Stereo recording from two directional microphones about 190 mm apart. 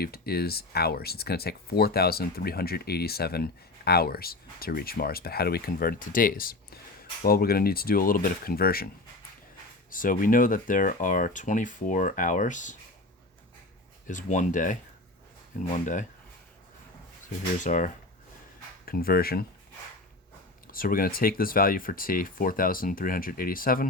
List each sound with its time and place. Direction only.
0.0 s speech: 55° left (ahead or behind)
9.9 s speech: 45° left (ahead or behind)
14.1 s speech: 40° left (ahead or behind)
17.6 s speech: 45° left (ahead or behind)
20.7 s speech: 50° left (ahead or behind)